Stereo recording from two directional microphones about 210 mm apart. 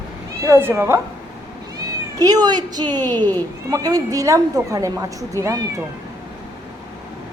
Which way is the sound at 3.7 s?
15° right (ahead or behind).